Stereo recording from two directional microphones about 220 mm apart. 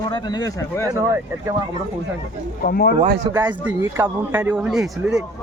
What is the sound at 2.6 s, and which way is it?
Speech, 45° left (ahead or behind).